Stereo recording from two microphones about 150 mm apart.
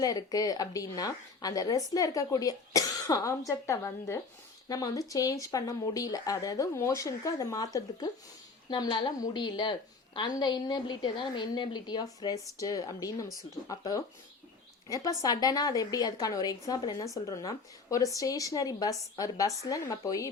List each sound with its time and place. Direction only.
0.0 s a woman's voice: 25° left (ahead or behind)